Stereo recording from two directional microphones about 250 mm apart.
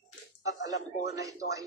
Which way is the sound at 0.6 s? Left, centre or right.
Left.